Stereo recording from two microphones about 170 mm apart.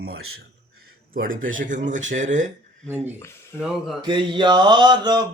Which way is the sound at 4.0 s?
30° right (ahead or behind).